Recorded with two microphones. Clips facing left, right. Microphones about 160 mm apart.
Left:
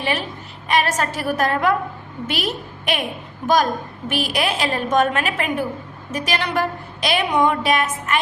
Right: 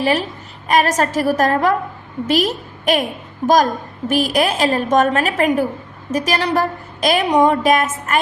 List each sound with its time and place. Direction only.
0.0 s a woman's voice: 40° right (ahead or behind)